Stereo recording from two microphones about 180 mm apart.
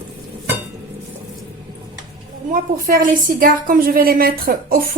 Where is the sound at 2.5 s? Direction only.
50° right (ahead or behind).